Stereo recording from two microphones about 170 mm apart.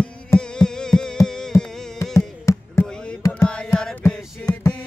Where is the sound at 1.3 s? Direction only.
5° left (ahead or behind).